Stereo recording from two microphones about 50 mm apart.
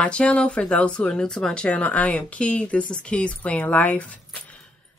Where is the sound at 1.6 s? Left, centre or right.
Left.